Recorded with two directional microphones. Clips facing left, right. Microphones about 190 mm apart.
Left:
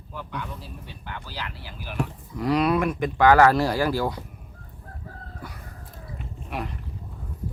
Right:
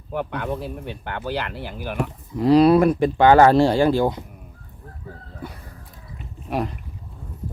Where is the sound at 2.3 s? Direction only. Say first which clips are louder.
Right 8 dB; 30° right (ahead or behind).